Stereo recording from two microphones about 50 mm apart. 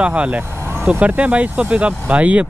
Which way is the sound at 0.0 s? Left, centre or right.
Right.